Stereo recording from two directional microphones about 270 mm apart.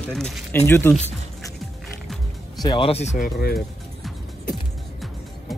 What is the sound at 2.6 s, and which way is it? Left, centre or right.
Speech, centre.